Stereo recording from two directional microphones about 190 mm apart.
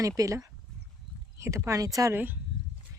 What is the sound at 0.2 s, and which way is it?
Speech, 15° right (ahead or behind).